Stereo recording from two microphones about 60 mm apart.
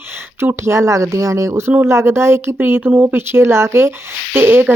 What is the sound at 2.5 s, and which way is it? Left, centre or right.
Speech, right.